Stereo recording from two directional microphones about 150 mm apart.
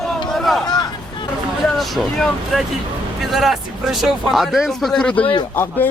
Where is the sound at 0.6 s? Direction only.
25° left (ahead or behind).